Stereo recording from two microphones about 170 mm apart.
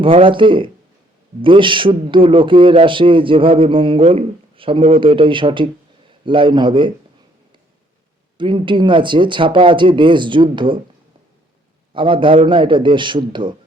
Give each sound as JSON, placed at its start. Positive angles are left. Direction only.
{"t": 0.0, "sound": "a man's voice", "side_deg": -30}
{"t": 8.4, "sound": "speech", "side_deg": -30}
{"t": 11.9, "sound": "a man's voice", "side_deg": -30}